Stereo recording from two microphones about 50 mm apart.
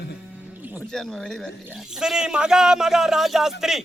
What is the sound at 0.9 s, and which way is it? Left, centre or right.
Speech, centre.